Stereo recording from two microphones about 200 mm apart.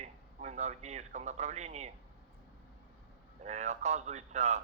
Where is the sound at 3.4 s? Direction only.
35° right (ahead or behind).